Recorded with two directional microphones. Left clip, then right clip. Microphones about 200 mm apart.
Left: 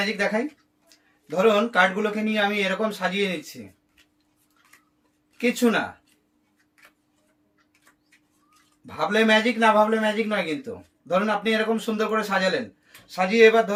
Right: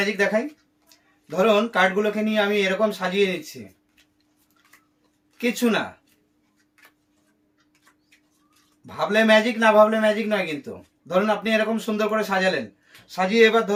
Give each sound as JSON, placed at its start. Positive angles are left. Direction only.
{"t": 0.0, "sound": "a man's voice", "side_deg": -15}
{"t": 5.4, "sound": "a man's voice", "side_deg": -15}
{"t": 8.9, "sound": "a man's voice", "side_deg": -15}